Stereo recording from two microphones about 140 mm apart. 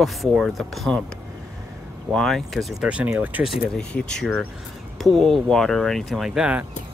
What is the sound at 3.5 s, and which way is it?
Speech, 5° left (ahead or behind).